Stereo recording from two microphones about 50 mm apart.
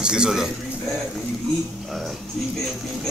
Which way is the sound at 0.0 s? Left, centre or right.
Centre.